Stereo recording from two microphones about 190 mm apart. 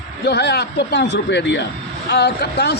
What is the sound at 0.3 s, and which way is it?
A man's voice, 60° left (ahead or behind).